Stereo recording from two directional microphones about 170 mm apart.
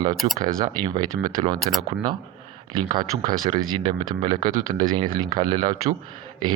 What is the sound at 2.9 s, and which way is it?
Speech, 25° right (ahead or behind).